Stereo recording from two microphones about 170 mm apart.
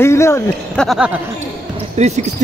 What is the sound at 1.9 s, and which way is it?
Speech, 40° right (ahead or behind).